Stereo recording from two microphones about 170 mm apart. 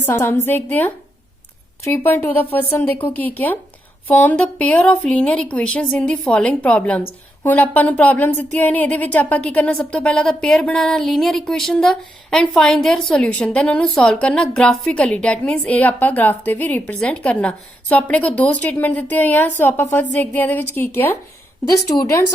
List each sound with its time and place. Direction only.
0.0 s speech: 15° left (ahead or behind)